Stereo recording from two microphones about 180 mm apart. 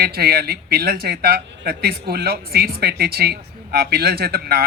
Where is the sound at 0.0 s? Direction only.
60° right (ahead or behind).